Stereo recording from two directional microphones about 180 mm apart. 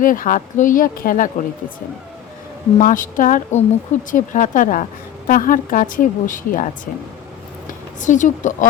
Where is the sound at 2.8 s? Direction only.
45° left (ahead or behind).